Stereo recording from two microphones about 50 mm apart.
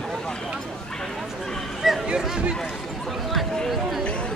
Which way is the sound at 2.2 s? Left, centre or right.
Centre.